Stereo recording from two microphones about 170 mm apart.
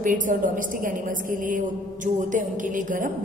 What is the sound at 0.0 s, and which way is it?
Speech, 50° right (ahead or behind).